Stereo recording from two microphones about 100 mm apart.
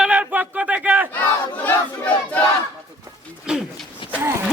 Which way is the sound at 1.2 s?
20° left (ahead or behind).